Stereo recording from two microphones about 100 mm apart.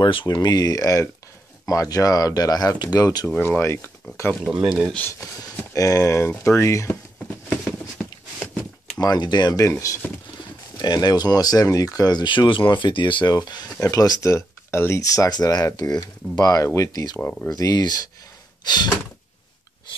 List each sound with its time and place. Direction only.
0.0 s speech: 50° left (ahead or behind)
3.3 s speech: 20° left (ahead or behind)
8.0 s a sound: 10° left (ahead or behind)
9.0 s speech: 45° left (ahead or behind)
10.8 s speech: 45° left (ahead or behind)
14.3 s speech: 25° left (ahead or behind)
18.6 s a sound: 45° left (ahead or behind)